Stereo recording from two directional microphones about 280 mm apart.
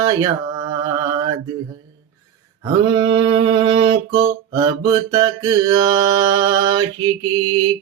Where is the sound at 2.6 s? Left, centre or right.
Centre.